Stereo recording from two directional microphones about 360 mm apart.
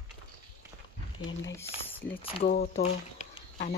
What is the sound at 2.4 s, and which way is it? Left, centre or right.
Speech, left.